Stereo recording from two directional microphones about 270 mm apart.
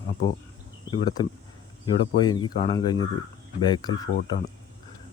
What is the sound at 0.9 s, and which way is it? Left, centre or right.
Speech, centre.